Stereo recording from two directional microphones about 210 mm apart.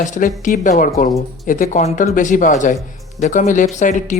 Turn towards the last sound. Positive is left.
turn(degrees=35)  # may be behind; listen again after turning